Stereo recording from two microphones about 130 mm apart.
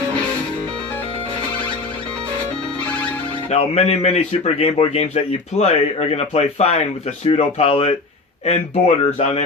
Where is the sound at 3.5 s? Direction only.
55° left (ahead or behind).